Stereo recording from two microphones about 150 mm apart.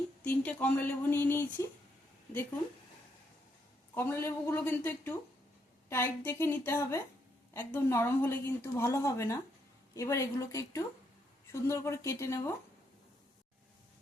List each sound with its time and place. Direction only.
0.2 s speech: 10° left (ahead or behind)
3.9 s a woman's voice: 15° left (ahead or behind)